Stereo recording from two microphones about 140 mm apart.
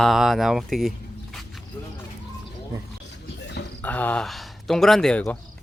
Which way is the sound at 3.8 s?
10° left (ahead or behind).